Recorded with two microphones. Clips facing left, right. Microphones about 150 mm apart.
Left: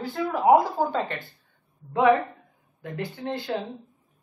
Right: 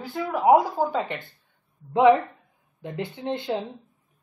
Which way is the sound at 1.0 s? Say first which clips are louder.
Even; 20° right (ahead or behind).